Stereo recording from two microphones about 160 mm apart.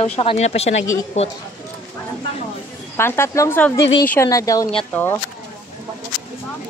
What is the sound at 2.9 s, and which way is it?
Speech, 15° left (ahead or behind).